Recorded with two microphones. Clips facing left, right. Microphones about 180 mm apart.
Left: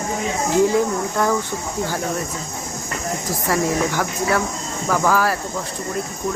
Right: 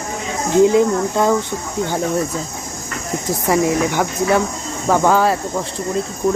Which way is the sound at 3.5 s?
20° right (ahead or behind).